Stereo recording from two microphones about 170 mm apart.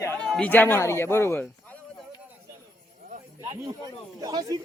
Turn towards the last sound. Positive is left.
turn(degrees=-20)  # may be behind; listen again after turning